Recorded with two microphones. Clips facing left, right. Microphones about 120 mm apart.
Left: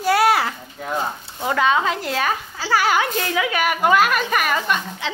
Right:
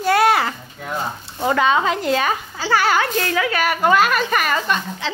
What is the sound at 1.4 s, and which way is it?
A woman's voice, centre (ahead or behind).